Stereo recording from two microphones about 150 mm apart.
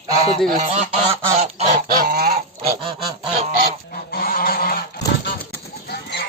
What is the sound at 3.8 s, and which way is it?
Goose, 85° left.